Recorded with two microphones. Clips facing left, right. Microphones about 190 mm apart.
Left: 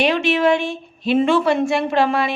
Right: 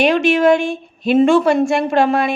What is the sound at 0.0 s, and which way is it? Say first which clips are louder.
A woman's voice: right 4 dB; 45° right (ahead or behind).